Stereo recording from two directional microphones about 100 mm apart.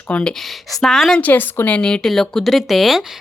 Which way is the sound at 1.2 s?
15° left (ahead or behind).